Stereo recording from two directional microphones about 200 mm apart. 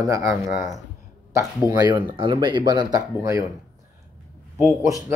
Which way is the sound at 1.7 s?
25° right (ahead or behind).